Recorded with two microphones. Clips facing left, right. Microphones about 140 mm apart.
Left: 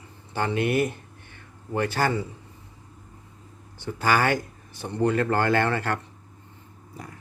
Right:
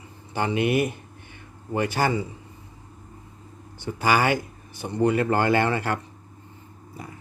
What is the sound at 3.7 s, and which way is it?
Speech, 15° right (ahead or behind).